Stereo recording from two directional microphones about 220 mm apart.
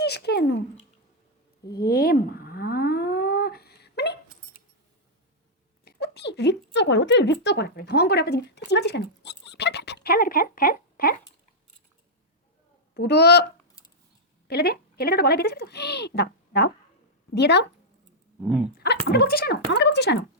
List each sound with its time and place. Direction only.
0.0 s speech: 50° left (ahead or behind)
1.7 s moo: 45° left (ahead or behind)
5.8 s speech: 50° left (ahead or behind)
12.9 s a woman's voice: 50° left (ahead or behind)
14.4 s speech: 45° left (ahead or behind)
19.1 s speech: 45° left (ahead or behind)